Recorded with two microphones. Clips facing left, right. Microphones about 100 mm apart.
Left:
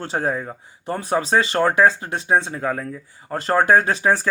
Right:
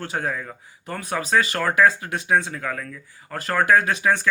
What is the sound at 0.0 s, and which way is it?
Speech, 30° left (ahead or behind).